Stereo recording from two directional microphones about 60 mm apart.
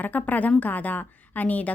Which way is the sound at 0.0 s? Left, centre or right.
Left.